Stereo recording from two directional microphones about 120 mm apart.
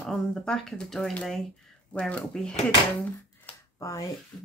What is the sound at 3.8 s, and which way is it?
Speech, 25° left (ahead or behind).